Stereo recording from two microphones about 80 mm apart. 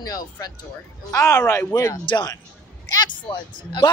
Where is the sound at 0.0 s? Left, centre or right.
Left.